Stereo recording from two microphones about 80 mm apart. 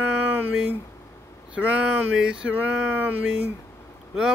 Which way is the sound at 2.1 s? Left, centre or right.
Centre.